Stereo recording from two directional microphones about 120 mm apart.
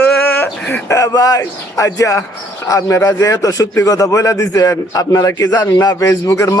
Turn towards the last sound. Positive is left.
turn(degrees=25)  # may be behind; listen again after turning